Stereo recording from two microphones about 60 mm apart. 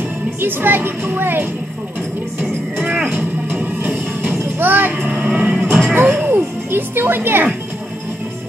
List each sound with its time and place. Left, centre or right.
0.4 s speech: right
2.9 s music: right
5.1 s vehicle: right
5.9 s speech: right